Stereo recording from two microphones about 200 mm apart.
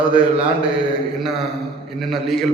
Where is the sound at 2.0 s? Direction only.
Centre (ahead or behind).